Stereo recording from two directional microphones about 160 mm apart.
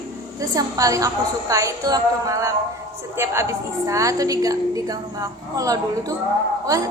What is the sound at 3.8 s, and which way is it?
A woman's voice, 20° right (ahead or behind).